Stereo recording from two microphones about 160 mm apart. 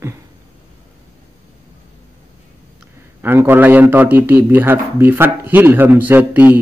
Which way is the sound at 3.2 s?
15° right (ahead or behind).